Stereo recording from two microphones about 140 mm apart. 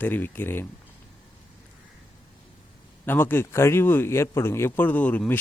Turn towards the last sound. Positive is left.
turn(degrees=10)  # may be behind; listen again after turning